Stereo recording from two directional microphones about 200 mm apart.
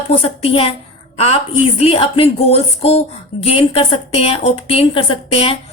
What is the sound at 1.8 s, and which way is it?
A woman's voice, 30° left (ahead or behind).